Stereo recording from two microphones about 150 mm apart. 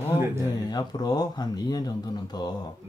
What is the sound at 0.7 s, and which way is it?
Speech, 25° left (ahead or behind).